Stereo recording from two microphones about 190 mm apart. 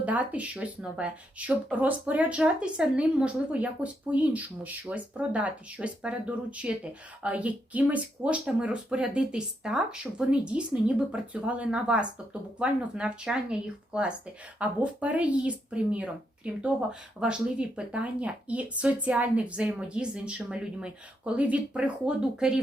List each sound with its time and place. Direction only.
0.0 s speech: 10° right (ahead or behind)